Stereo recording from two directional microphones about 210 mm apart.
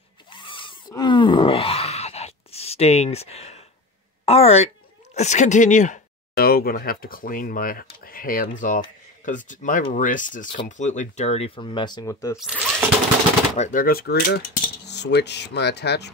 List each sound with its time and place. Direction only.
0.3 s groan: 25° left (ahead or behind)
4.3 s speech: 30° left (ahead or behind)
12.4 s speech: centre (ahead or behind)
13.6 s cutlery: 40° left (ahead or behind)